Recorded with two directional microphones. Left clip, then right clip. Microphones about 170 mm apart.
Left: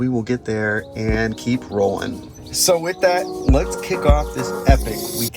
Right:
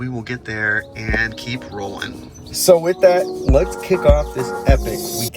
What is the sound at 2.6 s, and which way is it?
Speech, 15° right (ahead or behind).